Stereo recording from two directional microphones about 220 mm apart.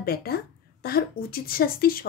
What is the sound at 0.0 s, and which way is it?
Speech, 45° left (ahead or behind).